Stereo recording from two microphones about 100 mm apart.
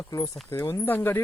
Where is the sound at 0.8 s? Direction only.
20° left (ahead or behind).